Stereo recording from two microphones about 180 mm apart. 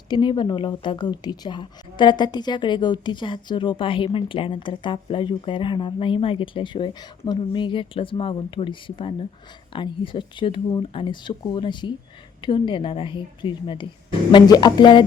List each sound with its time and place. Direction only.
0.1 s speech: 25° left (ahead or behind)